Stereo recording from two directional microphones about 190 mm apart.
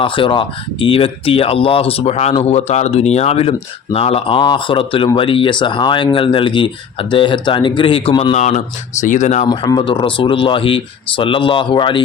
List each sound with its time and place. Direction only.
0.0 s speech: 25° left (ahead or behind)
9.5 s speech: 25° left (ahead or behind)